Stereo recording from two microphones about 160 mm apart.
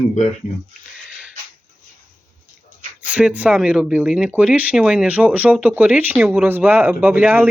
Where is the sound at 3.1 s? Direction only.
10° right (ahead or behind).